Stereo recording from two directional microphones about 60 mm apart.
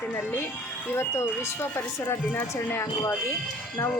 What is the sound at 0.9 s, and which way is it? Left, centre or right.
Speech, left.